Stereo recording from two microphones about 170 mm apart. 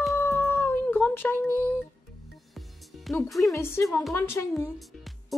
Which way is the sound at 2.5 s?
Centre (ahead or behind).